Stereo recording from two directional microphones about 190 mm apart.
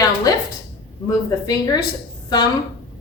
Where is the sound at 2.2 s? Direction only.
20° left (ahead or behind).